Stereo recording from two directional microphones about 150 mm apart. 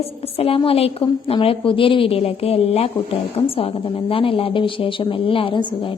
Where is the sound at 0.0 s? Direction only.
40° left (ahead or behind).